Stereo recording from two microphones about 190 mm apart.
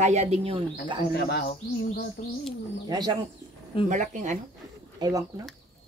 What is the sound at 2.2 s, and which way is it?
Speech, 45° left (ahead or behind).